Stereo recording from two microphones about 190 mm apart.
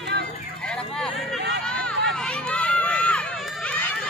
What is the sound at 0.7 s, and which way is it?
Vehicle, 5° left (ahead or behind).